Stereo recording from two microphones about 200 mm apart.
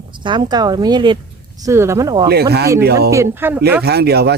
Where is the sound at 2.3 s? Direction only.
55° right (ahead or behind).